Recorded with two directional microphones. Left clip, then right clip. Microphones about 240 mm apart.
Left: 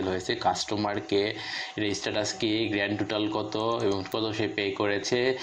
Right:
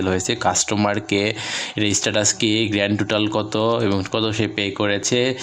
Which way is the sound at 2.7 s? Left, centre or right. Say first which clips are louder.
Right 8 dB; right.